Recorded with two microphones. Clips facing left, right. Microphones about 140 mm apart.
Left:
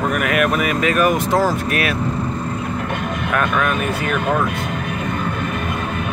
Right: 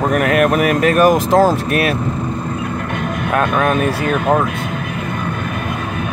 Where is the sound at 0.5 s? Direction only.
50° right (ahead or behind).